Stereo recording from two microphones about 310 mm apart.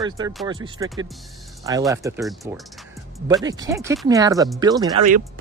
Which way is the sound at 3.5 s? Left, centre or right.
Centre.